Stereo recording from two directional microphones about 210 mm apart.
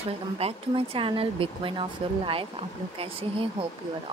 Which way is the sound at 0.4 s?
25° right (ahead or behind).